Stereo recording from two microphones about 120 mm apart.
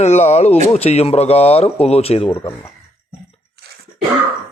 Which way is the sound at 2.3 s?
45° left (ahead or behind).